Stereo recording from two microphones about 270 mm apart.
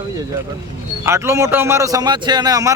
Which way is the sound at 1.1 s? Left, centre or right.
Centre.